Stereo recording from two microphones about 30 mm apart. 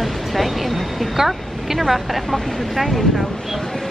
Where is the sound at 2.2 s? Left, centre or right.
Centre.